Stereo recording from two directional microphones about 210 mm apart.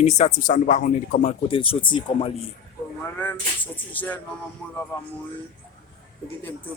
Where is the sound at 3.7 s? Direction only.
10° left (ahead or behind).